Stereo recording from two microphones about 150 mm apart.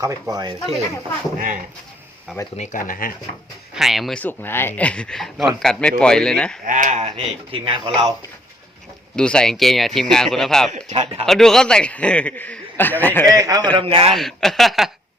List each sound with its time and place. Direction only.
0.0 s speech: 20° right (ahead or behind)
2.6 s speech: 65° left (ahead or behind)
3.8 s speech: centre (ahead or behind)
4.2 s a man's voice: 10° left (ahead or behind)
6.7 s speech: 55° right (ahead or behind); by 8.1 s 35° right (ahead or behind)
9.1 s speech: 5° left (ahead or behind)
10.7 s speech: 50° right (ahead or behind)
11.3 s a man's voice: 5° left (ahead or behind)
13.2 s speech: 25° right (ahead or behind)
13.7 s a man's voice: 35° right (ahead or behind)
14.1 s speech: centre (ahead or behind)